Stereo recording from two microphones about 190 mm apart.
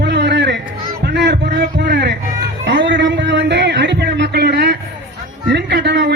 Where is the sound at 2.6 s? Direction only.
70° right (ahead or behind).